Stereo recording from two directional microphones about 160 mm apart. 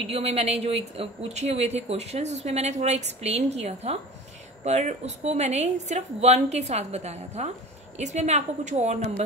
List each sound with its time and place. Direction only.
0.1 s speech: 40° right (ahead or behind)